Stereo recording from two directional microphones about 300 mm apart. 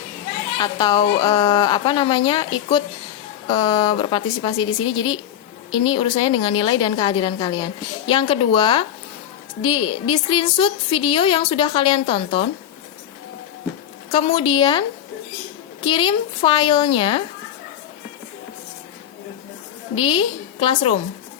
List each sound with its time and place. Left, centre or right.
0.6 s a woman's voice: centre
3.5 s a woman's voice: centre
14.1 s a woman's voice: centre
20.0 s a woman's voice: centre